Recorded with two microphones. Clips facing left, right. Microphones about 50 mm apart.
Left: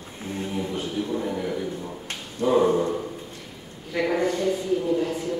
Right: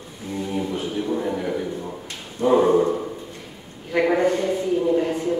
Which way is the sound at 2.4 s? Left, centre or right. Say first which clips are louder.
Right 3 dB; centre.